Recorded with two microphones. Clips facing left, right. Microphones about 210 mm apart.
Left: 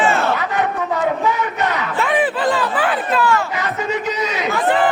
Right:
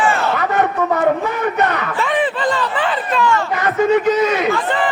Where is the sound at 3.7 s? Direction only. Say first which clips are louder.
Right 12 dB; 50° right (ahead or behind).